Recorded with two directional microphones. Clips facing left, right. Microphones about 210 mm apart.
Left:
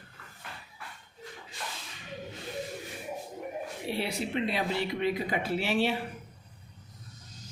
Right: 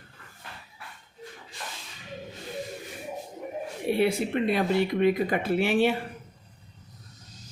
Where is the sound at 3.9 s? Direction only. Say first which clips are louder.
Right 8 dB; 55° right (ahead or behind).